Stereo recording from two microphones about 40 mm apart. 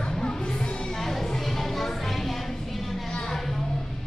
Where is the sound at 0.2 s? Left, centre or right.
Left.